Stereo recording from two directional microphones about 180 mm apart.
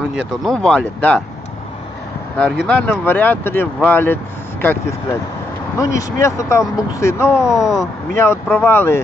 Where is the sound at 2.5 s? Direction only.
Centre (ahead or behind).